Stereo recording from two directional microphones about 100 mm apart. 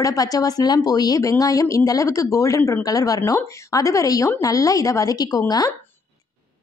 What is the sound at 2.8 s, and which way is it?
Speech, 35° left (ahead or behind).